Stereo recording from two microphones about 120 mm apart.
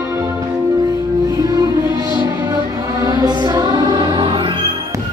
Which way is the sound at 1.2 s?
30° right (ahead or behind).